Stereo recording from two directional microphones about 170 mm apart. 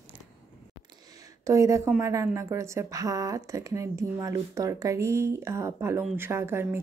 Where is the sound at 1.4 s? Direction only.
20° right (ahead or behind).